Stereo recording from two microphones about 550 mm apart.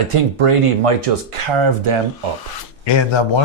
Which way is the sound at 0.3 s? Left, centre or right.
Right.